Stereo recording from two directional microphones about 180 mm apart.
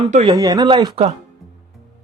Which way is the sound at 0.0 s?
35° right (ahead or behind).